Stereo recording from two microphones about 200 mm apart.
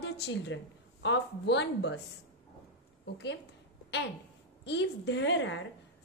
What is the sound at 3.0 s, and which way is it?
Speech, 60° left (ahead or behind).